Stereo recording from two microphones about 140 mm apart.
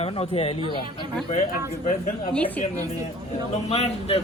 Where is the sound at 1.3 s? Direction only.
55° left (ahead or behind).